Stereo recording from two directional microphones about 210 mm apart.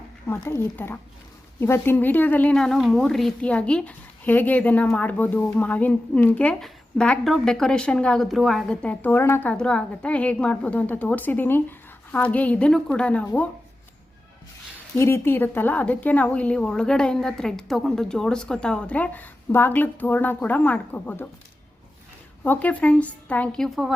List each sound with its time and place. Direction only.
0.3 s a woman's voice: 10° left (ahead or behind)
14.9 s a woman's voice: 10° left (ahead or behind)
22.4 s a woman's voice: 5° left (ahead or behind)